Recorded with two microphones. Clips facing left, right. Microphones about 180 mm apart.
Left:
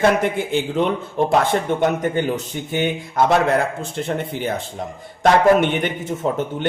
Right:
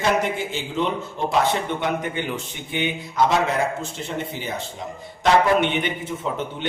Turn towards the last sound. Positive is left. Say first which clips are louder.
# left 4 dB
turn(degrees=45)  # may be behind; listen again after turning